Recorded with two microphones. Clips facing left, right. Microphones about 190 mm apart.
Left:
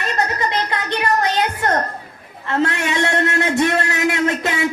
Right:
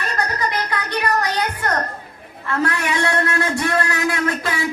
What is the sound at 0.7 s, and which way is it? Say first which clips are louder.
Music: left 1 dB; 25° left (ahead or behind).